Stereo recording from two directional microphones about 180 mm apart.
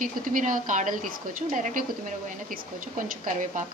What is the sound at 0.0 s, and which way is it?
A woman's voice, 45° right (ahead or behind).